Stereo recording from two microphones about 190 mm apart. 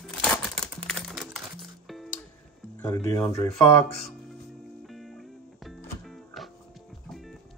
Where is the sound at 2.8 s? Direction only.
20° left (ahead or behind).